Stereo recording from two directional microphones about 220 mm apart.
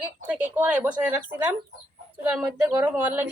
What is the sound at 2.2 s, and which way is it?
A woman's voice, centre (ahead or behind).